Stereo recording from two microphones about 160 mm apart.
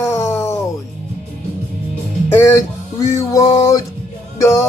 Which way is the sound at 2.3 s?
15° left (ahead or behind).